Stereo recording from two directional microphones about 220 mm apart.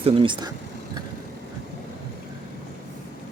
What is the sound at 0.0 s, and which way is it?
Speech, 25° right (ahead or behind).